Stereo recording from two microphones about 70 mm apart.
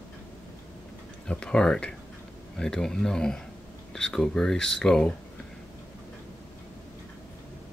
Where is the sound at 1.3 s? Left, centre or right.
Centre.